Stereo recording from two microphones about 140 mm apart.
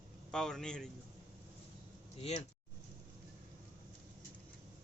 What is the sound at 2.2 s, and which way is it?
Speech, 45° left (ahead or behind).